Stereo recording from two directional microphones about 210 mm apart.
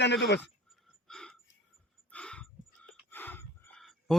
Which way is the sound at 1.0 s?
5° left (ahead or behind).